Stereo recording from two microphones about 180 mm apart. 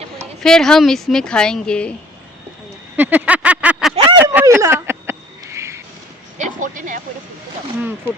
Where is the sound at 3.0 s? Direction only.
10° right (ahead or behind).